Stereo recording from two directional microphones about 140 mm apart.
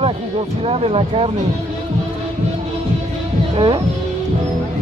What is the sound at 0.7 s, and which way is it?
Speech, 45° right (ahead or behind).